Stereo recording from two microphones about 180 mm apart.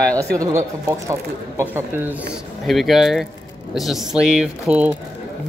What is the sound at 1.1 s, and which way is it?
Speech, 15° right (ahead or behind).